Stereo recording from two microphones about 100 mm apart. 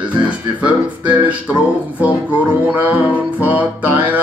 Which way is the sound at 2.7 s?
15° right (ahead or behind).